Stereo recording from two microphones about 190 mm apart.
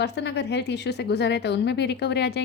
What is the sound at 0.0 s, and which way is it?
Speech, 65° left (ahead or behind).